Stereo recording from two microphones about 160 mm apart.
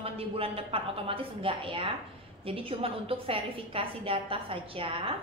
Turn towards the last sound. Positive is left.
turn(degrees=-35)  # may be behind; listen again after turning